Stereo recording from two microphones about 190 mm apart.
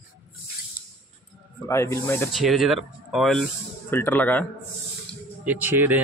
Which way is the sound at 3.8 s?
10° left (ahead or behind).